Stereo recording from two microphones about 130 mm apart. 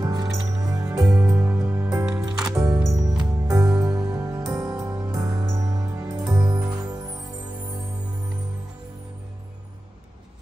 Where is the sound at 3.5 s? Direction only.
25° right (ahead or behind).